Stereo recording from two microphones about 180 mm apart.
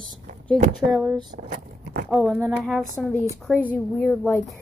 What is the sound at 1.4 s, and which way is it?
Vehicle, 40° right (ahead or behind).